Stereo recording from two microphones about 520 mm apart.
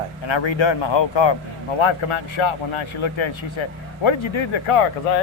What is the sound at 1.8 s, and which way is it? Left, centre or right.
Speech, left.